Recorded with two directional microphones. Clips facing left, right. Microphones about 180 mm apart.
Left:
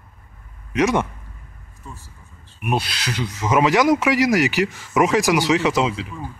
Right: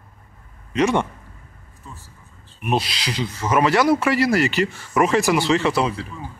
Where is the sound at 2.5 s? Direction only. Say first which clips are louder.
Right 1 dB; 5° left (ahead or behind).